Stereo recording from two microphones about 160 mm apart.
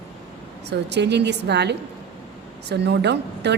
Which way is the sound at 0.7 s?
90° right.